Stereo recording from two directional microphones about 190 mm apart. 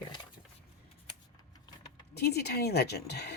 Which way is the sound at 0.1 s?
25° left (ahead or behind).